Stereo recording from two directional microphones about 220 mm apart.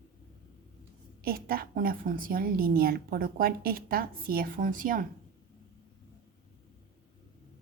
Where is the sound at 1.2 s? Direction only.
45° right (ahead or behind).